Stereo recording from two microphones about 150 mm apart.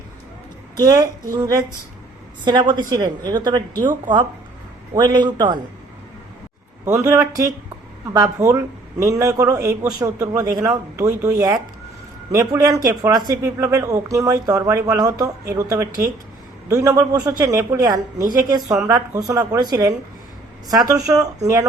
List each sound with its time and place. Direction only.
0.8 s speech: 25° right (ahead or behind)
4.9 s speech: 30° right (ahead or behind)
6.8 s speech: 20° right (ahead or behind)
20.7 s speech: 25° right (ahead or behind)